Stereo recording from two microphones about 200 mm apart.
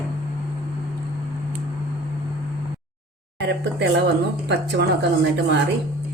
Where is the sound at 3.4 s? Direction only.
60° right (ahead or behind).